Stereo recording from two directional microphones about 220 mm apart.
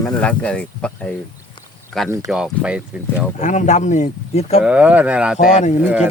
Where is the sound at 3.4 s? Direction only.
35° left (ahead or behind).